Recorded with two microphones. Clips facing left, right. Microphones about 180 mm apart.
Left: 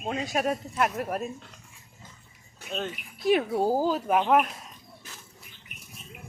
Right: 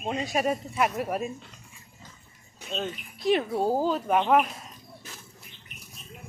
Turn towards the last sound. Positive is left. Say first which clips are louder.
# even
turn(degrees=0)  # may be behind; listen again after turning